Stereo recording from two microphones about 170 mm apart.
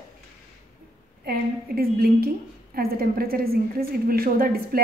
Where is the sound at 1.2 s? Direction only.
60° right (ahead or behind).